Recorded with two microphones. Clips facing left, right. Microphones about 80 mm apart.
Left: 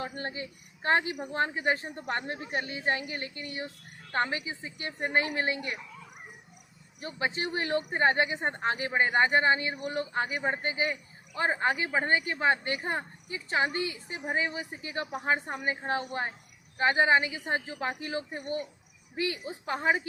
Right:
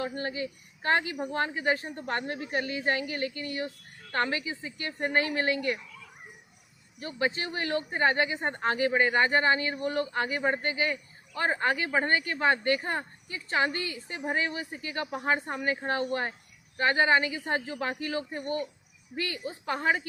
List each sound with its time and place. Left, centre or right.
0.0 s a woman's voice: left; by 20.0 s centre